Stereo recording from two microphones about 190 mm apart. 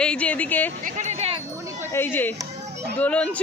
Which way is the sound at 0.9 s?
40° right (ahead or behind).